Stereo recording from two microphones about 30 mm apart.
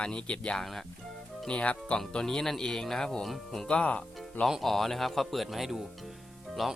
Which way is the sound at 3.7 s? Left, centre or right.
Left.